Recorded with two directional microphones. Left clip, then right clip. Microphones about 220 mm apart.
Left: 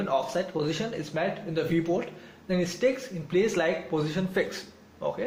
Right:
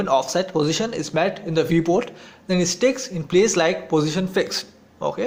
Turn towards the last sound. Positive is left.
turn(degrees=-30)  # may be behind; listen again after turning